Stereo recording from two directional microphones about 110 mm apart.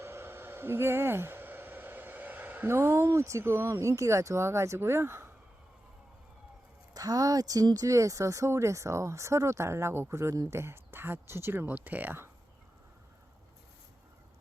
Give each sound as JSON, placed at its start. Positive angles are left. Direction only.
{"t": 0.0, "sound": "speech", "side_deg": -20}
{"t": 6.9, "sound": "speech", "side_deg": -35}